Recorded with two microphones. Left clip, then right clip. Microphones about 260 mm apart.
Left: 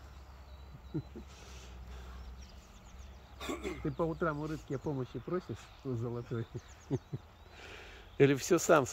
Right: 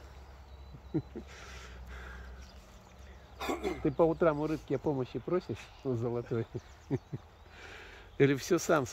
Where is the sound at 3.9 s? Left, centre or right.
Centre.